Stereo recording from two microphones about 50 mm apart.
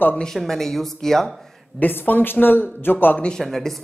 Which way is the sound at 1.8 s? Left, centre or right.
Left.